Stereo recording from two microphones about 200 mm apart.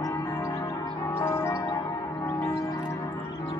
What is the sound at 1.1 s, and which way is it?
Change ringing, 15° left (ahead or behind).